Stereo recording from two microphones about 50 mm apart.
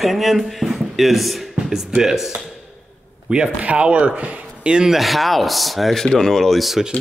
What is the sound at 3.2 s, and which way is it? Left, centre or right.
Speech, right.